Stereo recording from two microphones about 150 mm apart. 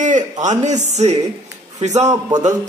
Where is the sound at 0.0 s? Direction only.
55° right (ahead or behind).